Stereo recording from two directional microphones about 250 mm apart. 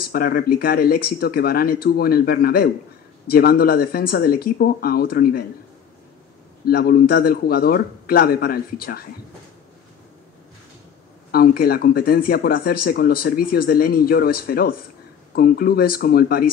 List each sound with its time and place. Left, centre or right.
0.0 s speech: left
6.6 s speech: left
11.3 s speech: left